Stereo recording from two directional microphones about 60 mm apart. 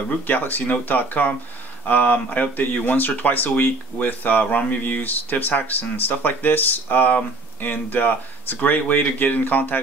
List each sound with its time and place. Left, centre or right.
0.3 s speech: left